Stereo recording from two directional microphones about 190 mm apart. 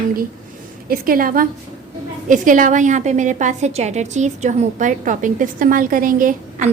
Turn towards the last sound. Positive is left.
turn(degrees=-45)  # may be behind; listen again after turning